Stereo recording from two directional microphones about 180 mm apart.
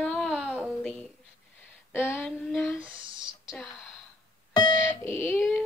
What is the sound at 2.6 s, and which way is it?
Speech, 5° right (ahead or behind).